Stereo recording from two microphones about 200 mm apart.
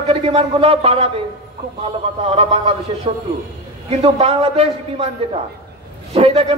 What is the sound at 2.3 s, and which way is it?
A man's voice, 30° right (ahead or behind).